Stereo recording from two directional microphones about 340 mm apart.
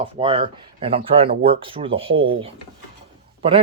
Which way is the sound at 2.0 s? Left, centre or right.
Right.